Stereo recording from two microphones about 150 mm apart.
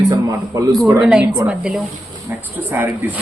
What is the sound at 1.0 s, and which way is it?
Speech, 5° right (ahead or behind).